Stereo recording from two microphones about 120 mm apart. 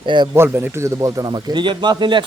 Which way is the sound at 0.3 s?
20° right (ahead or behind).